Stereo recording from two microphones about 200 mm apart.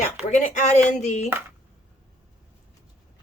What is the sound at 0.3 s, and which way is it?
Speech, 40° left (ahead or behind).